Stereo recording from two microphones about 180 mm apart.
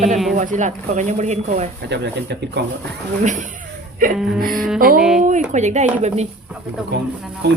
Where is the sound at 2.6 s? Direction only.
70° right (ahead or behind).